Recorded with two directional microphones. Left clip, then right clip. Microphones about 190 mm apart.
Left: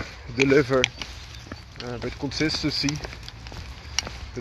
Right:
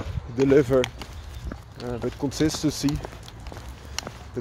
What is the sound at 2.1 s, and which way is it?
Speech, 35° right (ahead or behind).